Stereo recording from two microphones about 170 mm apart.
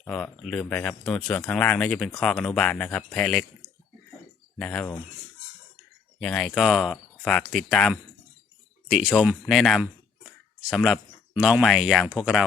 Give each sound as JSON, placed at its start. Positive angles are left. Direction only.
{"t": 0.0, "sound": "speech", "side_deg": 5}
{"t": 4.5, "sound": "speech", "side_deg": 5}
{"t": 6.1, "sound": "speech", "side_deg": 5}